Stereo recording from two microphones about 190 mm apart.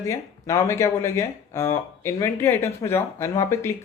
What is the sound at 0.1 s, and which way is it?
Speech, 15° left (ahead or behind).